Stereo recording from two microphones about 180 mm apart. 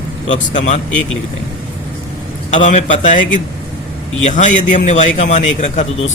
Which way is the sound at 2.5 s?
40° left (ahead or behind).